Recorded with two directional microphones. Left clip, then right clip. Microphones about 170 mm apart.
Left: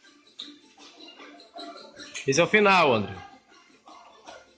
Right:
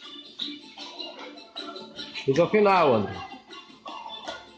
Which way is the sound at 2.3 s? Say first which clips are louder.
Left 1 dB; 15° left (ahead or behind).